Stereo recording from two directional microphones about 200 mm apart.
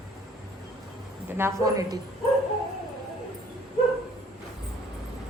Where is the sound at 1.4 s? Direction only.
15° right (ahead or behind).